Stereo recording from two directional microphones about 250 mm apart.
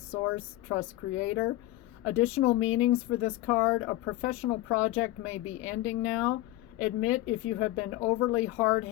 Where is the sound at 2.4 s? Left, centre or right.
Left.